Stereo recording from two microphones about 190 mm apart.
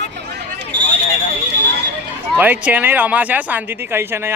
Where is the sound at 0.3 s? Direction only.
60° right (ahead or behind).